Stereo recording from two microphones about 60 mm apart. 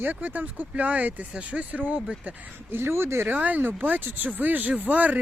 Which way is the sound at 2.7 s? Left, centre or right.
Right.